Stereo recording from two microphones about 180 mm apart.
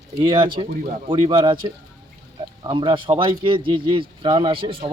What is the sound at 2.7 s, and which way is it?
Speech, 25° right (ahead or behind).